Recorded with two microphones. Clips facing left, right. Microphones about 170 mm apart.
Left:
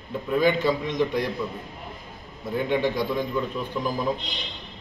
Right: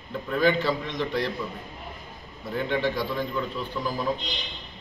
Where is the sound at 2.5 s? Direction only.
15° left (ahead or behind).